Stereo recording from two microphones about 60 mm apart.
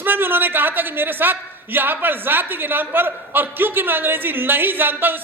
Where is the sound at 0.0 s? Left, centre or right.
Right.